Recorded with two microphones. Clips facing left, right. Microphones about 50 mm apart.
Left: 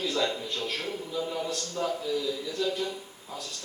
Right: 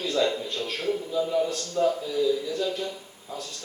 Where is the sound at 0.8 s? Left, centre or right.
Centre.